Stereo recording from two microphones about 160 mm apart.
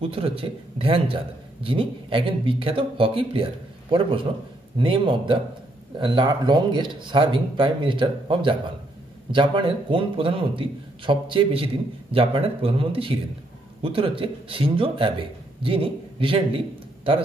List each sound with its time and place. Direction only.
0.0 s a man's voice: 35° right (ahead or behind)